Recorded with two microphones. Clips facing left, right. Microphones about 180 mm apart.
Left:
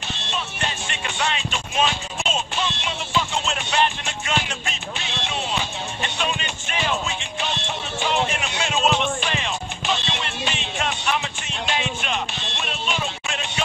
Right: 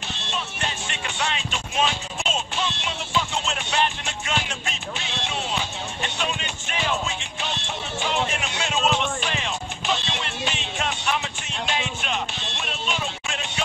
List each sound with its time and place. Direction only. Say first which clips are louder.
0.3 s music: left 1 dB; 85° left